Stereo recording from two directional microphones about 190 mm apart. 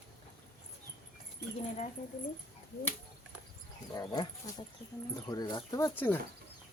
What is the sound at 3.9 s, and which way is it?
Speech, 20° left (ahead or behind).